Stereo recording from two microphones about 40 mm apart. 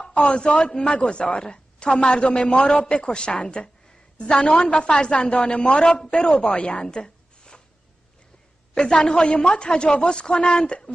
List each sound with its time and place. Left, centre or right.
0.1 s speech: left
4.5 s a woman's voice: left
8.7 s speech: centre